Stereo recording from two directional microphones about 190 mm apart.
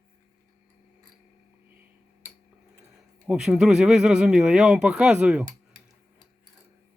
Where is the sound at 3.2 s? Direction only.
5° right (ahead or behind).